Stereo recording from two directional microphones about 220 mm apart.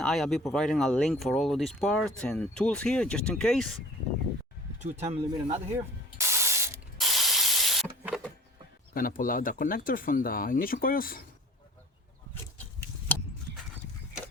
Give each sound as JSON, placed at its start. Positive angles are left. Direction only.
{"t": 0.0, "sound": "speech", "side_deg": 0}
{"t": 4.8, "sound": "speech", "side_deg": -30}
{"t": 6.1, "sound": "spray", "side_deg": -10}
{"t": 7.0, "sound": "rub", "side_deg": 0}
{"t": 9.0, "sound": "speech", "side_deg": 40}